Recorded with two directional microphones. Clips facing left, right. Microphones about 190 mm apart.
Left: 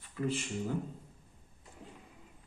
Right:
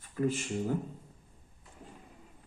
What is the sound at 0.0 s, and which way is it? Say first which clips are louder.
Speech: right 4 dB; 45° right (ahead or behind).